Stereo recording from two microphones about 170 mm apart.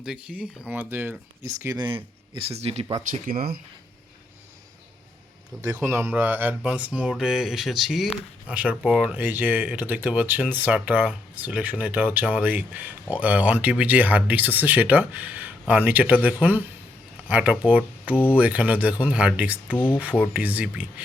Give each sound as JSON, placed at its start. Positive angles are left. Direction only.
{"t": 0.0, "sound": "speech", "side_deg": -5}
{"t": 1.6, "sound": "speech", "side_deg": -25}
{"t": 2.3, "sound": "speech", "side_deg": -35}
{"t": 3.1, "sound": "speech", "side_deg": -55}
{"t": 5.6, "sound": "speech", "side_deg": -15}
{"t": 18.1, "sound": "speech", "side_deg": 10}
{"t": 18.3, "sound": "speech", "side_deg": -10}
{"t": 19.7, "sound": "speech", "side_deg": 10}
{"t": 20.0, "sound": "speech", "side_deg": -10}